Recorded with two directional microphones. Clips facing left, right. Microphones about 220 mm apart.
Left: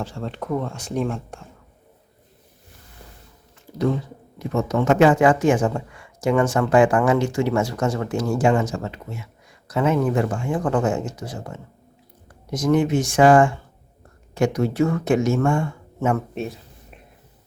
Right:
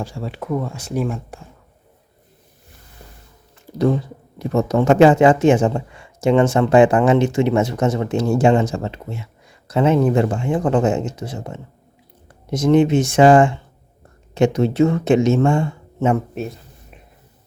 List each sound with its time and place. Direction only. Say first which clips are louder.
0.0 s speech: right 1 dB; 10° right (ahead or behind)
4.4 s speech: right 4 dB; 35° right (ahead or behind)
16.3 s a sound: right 1 dB; centre (ahead or behind)